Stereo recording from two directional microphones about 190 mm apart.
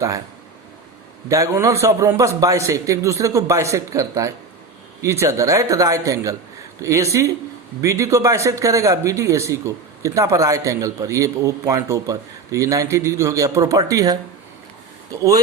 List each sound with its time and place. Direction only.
1.3 s speech: 15° right (ahead or behind)